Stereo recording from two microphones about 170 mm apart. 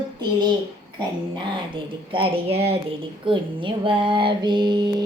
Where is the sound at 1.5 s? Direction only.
30° right (ahead or behind).